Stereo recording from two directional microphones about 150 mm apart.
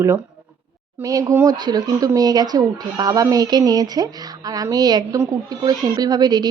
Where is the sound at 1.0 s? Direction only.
20° right (ahead or behind).